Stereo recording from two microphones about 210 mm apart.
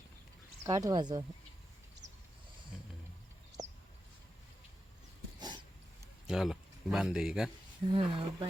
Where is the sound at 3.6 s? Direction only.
35° right (ahead or behind).